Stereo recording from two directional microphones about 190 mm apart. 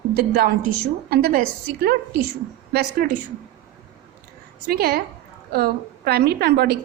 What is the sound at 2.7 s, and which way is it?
Speech, 55° right (ahead or behind).